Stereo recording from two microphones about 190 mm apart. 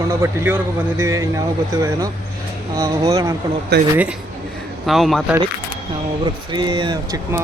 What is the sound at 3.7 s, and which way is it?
Speech, 60° right (ahead or behind).